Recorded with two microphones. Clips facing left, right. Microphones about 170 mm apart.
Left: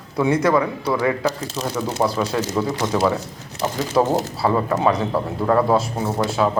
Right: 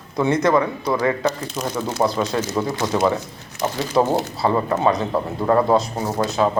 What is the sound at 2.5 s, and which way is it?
Speech, 10° right (ahead or behind).